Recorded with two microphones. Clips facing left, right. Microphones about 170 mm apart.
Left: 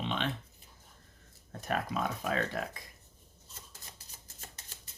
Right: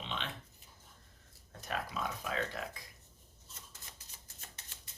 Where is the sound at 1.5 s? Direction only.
50° left (ahead or behind).